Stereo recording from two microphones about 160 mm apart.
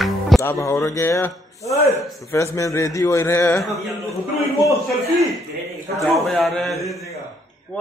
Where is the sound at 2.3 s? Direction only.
20° left (ahead or behind).